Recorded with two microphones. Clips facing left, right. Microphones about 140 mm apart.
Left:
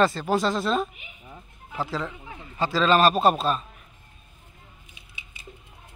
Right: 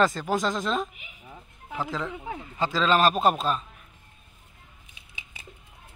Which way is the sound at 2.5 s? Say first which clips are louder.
Left 2 dB; 15° right (ahead or behind).